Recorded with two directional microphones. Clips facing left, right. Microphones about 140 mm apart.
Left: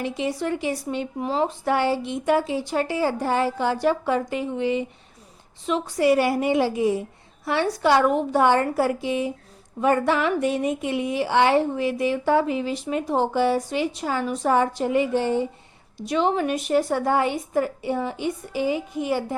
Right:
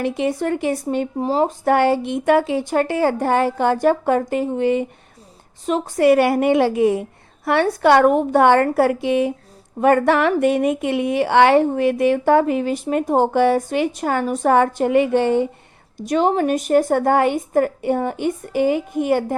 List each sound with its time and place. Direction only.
0.0 s a woman's voice: 55° right (ahead or behind)
1.2 s speech: 35° right (ahead or behind); by 15.4 s 65° right (ahead or behind)
16.0 s a woman's voice: 45° right (ahead or behind)